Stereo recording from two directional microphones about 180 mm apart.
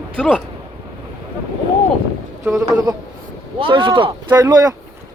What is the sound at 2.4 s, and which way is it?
Speech, 15° right (ahead or behind).